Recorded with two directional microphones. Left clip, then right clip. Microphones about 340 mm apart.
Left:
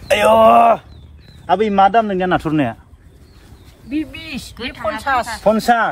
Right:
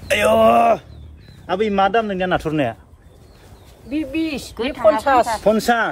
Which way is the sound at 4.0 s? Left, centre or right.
Centre.